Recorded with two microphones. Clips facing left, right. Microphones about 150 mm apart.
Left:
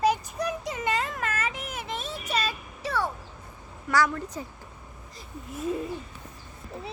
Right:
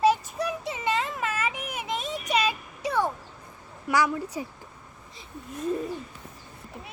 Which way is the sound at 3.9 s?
10° right (ahead or behind).